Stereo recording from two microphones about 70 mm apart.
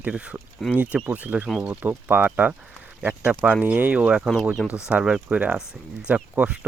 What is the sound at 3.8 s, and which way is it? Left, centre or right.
Speech, right.